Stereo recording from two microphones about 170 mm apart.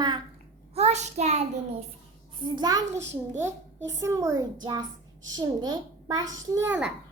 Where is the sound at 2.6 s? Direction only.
20° right (ahead or behind).